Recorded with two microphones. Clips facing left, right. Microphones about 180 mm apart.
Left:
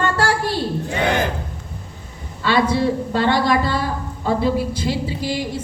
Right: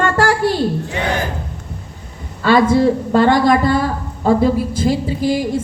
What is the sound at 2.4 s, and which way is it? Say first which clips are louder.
A woman's voice: right 6 dB; 45° right (ahead or behind).